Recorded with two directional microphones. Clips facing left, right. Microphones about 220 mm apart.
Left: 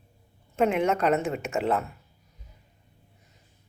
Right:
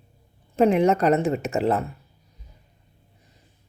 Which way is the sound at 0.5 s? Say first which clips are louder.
Right 5 dB; 35° right (ahead or behind).